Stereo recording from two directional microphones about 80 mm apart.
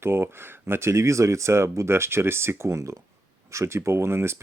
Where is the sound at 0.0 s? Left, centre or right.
Right.